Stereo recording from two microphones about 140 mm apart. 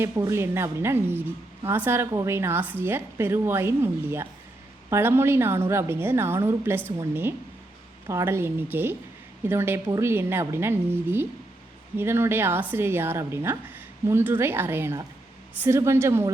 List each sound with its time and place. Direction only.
0.0 s a woman's voice: 20° right (ahead or behind)